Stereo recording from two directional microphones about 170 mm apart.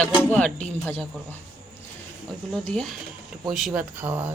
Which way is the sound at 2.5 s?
5° left (ahead or behind).